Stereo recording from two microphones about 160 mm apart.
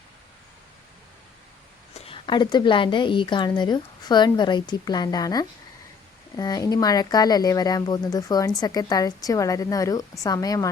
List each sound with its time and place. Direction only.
2.0 s a woman's voice: 35° left (ahead or behind)